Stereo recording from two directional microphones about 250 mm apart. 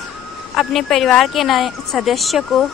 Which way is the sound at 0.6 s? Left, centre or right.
Centre.